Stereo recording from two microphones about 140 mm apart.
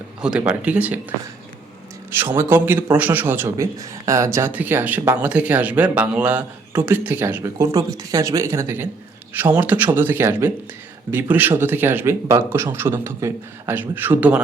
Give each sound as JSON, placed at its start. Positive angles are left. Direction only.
{"t": 0.2, "sound": "speech", "side_deg": -5}
{"t": 2.0, "sound": "speech", "side_deg": -15}